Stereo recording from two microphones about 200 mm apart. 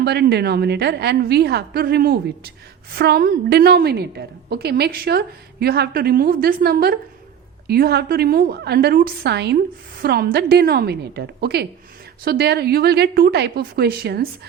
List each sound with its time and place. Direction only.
0.0 s a woman's voice: 55° right (ahead or behind)